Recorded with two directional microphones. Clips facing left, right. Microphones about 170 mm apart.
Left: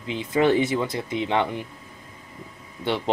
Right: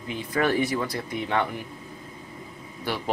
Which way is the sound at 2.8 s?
25° left (ahead or behind).